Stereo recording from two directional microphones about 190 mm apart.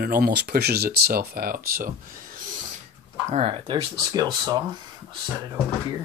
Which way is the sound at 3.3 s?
35° right (ahead or behind).